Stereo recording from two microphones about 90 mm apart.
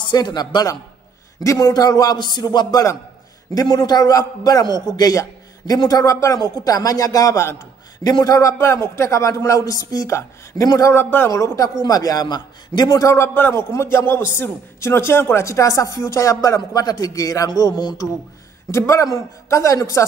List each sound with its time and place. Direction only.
0.0 s a man's voice: 55° left (ahead or behind); by 11.3 s 25° left (ahead or behind)
11.3 s a man's voice: 35° left (ahead or behind)
13.7 s a man's voice: 25° left (ahead or behind); by 18.0 s 50° left (ahead or behind)
18.7 s a man's voice: 30° left (ahead or behind)